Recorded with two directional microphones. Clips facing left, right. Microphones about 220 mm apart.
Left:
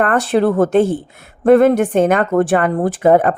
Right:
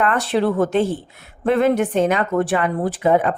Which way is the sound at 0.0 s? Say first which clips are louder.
Left 4 dB; 50° left (ahead or behind).